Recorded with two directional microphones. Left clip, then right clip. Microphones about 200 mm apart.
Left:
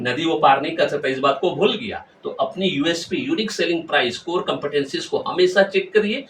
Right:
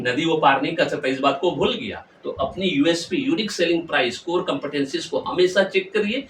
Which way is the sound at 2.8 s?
15° right (ahead or behind).